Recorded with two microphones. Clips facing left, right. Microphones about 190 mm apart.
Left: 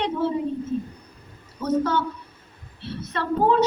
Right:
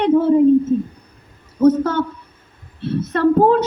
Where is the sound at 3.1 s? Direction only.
50° right (ahead or behind).